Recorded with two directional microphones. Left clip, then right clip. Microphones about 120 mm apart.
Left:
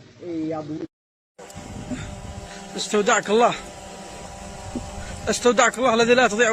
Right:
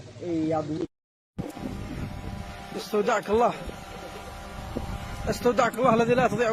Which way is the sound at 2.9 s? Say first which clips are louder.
Left 5 dB; centre (ahead or behind).